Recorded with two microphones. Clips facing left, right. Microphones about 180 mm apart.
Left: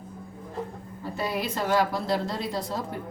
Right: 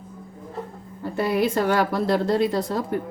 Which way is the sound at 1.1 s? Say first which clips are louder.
Right 8 dB; 55° right (ahead or behind).